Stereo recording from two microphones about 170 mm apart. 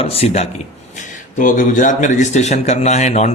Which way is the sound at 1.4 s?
50° left (ahead or behind).